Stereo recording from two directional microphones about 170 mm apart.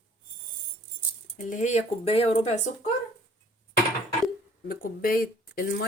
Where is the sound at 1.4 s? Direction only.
45° left (ahead or behind).